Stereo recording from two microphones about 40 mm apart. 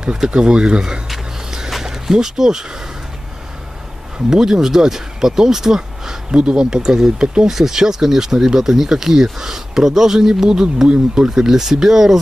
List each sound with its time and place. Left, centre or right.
0.0 s speech: right
1.0 s a sound: centre
4.3 s speech: centre